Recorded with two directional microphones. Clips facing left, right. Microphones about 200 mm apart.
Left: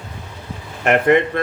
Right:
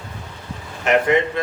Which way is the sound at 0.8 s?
55° left (ahead or behind).